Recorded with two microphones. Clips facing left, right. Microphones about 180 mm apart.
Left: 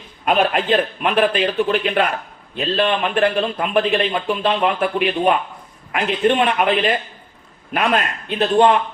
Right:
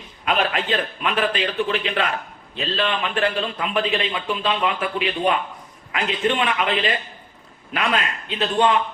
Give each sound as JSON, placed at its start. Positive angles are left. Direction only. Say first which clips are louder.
{"t": 0.3, "sound": "a man's voice", "louder": "left 5 dB", "side_deg": 50}